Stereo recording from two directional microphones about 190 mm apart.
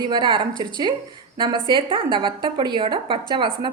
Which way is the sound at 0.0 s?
25° right (ahead or behind).